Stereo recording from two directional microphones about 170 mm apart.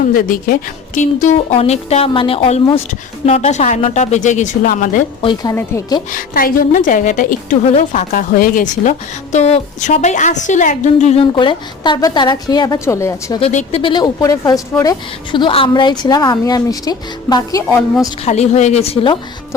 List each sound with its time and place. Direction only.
0.1 s a woman's voice: 55° left (ahead or behind)
5.2 s speech: 25° left (ahead or behind)
6.1 s a woman's voice: 55° left (ahead or behind)
7.7 s a woman's voice: 40° left (ahead or behind)
8.1 s a woman's voice: 55° left (ahead or behind); by 13.4 s 15° left (ahead or behind)
13.4 s speech: 40° left (ahead or behind); by 17.7 s 20° left (ahead or behind)
18.3 s a woman's voice: 40° left (ahead or behind)